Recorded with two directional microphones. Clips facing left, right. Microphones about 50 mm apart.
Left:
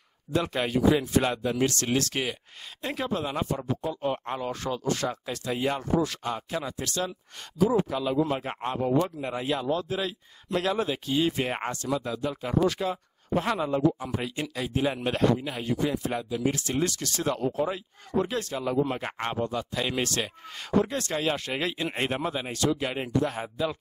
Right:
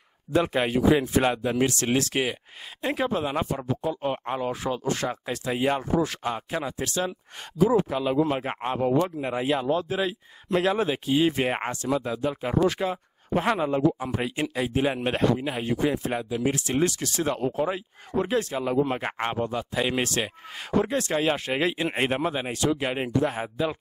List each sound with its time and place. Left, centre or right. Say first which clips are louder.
0.3 s a man's voice: right 3 dB; centre
4.7 s a man's voice: right 1 dB; right
7.9 s a man's voice: right 2 dB; right